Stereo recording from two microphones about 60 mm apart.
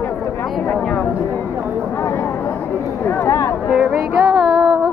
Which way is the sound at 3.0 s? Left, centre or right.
Left.